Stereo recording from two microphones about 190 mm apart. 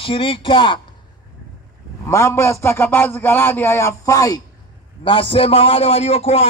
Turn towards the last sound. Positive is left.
turn(degrees=35)  # may be behind; listen again after turning